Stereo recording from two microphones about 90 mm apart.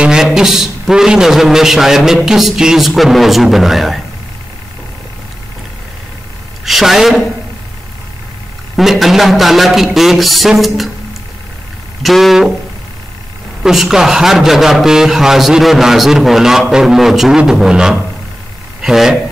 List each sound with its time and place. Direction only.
0.0 s a man's voice: 5° right (ahead or behind)
6.6 s a man's voice: centre (ahead or behind)
8.7 s a man's voice: centre (ahead or behind)
12.0 s a man's voice: centre (ahead or behind)
13.6 s a man's voice: 5° right (ahead or behind)